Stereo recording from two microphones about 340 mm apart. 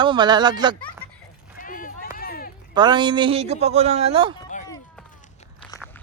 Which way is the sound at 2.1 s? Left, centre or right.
Left.